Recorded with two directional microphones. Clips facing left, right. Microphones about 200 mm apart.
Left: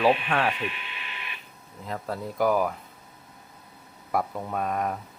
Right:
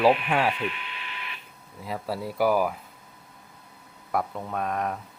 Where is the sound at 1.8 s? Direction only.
5° right (ahead or behind).